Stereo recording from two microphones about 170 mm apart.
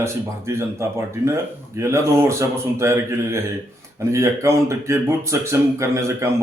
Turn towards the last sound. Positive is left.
turn(degrees=-15)  # may be behind; listen again after turning